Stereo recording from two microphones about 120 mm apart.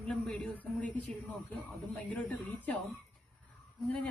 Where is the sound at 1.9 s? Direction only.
10° left (ahead or behind).